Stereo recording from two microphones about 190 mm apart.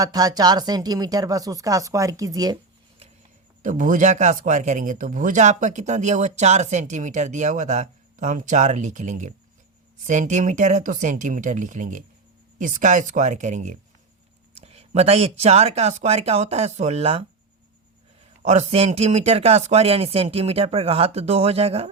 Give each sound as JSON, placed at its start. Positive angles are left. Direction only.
{"t": 0.0, "sound": "speech", "side_deg": -20}
{"t": 3.6, "sound": "speech", "side_deg": -40}
{"t": 18.4, "sound": "speech", "side_deg": -35}